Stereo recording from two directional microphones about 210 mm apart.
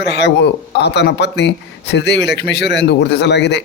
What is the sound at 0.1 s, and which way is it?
Speech, 55° left (ahead or behind).